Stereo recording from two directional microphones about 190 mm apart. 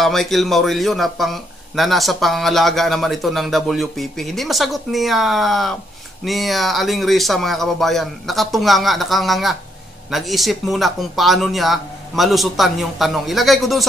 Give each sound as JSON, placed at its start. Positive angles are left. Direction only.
{"t": 0.0, "sound": "speech", "side_deg": 0}